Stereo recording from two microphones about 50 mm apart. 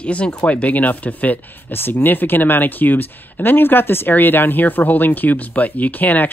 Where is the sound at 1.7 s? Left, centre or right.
Left.